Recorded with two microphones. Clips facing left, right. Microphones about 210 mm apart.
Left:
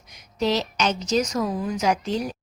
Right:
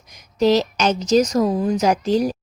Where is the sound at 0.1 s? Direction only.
40° right (ahead or behind).